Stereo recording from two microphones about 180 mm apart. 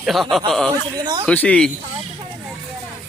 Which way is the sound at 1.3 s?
5° left (ahead or behind).